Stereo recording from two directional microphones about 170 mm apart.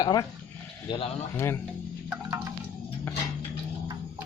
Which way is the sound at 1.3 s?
15° left (ahead or behind).